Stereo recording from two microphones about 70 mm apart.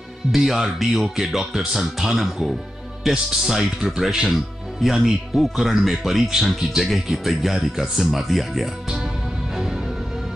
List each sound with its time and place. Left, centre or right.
0.3 s speech: centre